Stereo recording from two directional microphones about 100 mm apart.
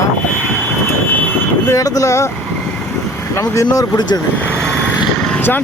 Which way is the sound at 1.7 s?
35° left (ahead or behind).